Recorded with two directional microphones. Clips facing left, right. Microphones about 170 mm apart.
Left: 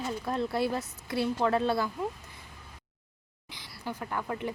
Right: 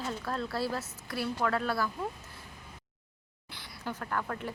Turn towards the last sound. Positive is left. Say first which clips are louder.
# left 1 dB
turn(degrees=15)  # may be behind; listen again after turning